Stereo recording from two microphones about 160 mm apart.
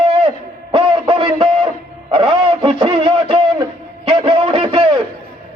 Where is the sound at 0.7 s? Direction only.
30° right (ahead or behind).